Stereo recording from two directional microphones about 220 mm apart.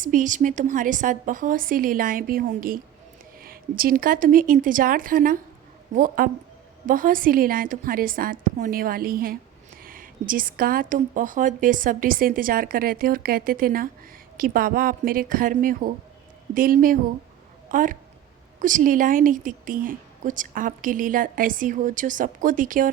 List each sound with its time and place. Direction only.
0.0 s a woman's voice: 35° right (ahead or behind)